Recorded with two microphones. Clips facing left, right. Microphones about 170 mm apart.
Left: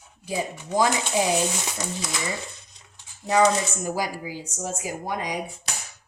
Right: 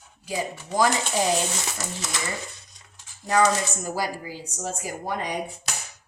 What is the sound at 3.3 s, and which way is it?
Speech, 15° left (ahead or behind).